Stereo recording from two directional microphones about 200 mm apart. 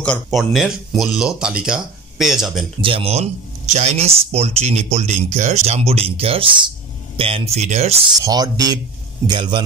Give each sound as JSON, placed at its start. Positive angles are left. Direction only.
{"t": 0.0, "sound": "speech", "side_deg": 0}
{"t": 2.8, "sound": "speech", "side_deg": -30}
{"t": 8.2, "sound": "speech", "side_deg": -20}